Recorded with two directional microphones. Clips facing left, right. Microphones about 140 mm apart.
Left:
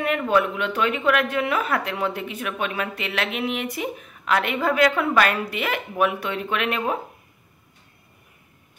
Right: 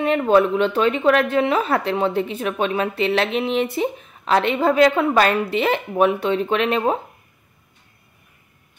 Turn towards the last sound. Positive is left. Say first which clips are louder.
# right 5 dB
turn(degrees=-30)  # may be behind; listen again after turning